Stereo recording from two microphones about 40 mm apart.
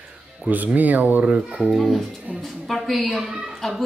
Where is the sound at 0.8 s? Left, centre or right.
Right.